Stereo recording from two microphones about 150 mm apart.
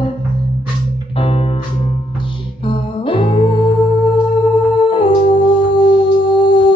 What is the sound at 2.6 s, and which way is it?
Music, 35° left (ahead or behind).